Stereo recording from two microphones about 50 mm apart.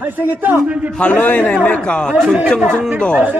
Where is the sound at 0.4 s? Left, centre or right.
Right.